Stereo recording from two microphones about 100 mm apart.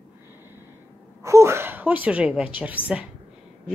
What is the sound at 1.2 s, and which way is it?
A woman's voice, 30° right (ahead or behind).